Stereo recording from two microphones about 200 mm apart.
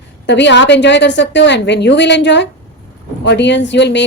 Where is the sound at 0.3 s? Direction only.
60° left (ahead or behind).